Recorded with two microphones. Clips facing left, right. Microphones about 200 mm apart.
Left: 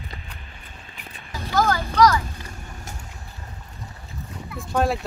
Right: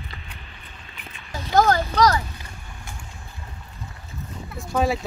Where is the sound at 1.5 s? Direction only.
30° right (ahead or behind).